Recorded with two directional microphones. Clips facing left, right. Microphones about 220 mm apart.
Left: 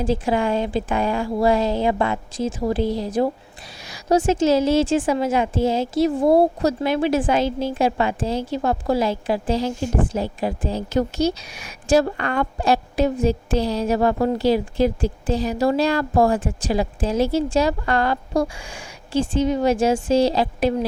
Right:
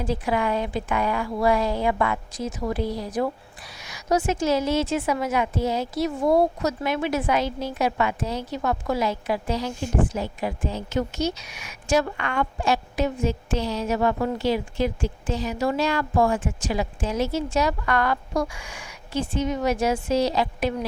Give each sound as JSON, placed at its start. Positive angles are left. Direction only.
{"t": 0.0, "sound": "a woman's voice", "side_deg": 30}